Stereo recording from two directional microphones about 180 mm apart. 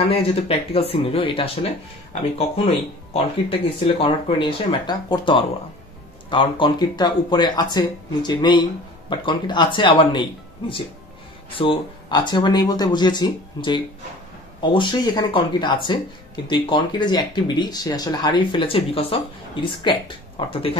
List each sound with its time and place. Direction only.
0.1 s speech: 35° left (ahead or behind)
11.5 s speech: 30° left (ahead or behind)